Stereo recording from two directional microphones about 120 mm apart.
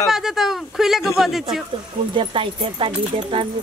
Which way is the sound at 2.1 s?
45° right (ahead or behind).